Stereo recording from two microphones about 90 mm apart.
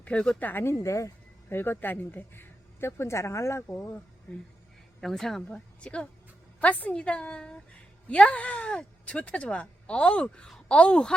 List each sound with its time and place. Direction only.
0.0 s speech: 10° left (ahead or behind); by 3.8 s 35° left (ahead or behind)
4.3 s speech: 20° left (ahead or behind)
4.9 s a woman's voice: 5° left (ahead or behind)